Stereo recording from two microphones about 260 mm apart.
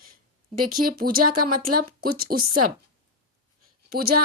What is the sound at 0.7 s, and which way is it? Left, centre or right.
Speech, right.